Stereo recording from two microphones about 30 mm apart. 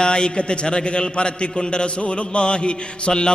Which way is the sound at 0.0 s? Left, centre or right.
Left.